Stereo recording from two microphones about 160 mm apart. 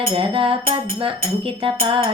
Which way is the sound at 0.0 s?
35° right (ahead or behind).